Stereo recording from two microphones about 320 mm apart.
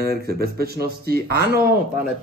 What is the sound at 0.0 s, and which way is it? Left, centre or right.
Speech, right.